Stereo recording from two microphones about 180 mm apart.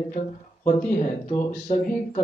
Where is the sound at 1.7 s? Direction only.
35° left (ahead or behind).